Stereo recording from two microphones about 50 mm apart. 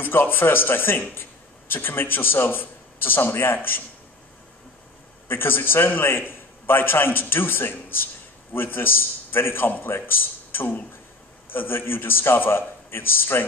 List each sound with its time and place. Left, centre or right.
0.0 s a man's voice: left
5.3 s a man's voice: left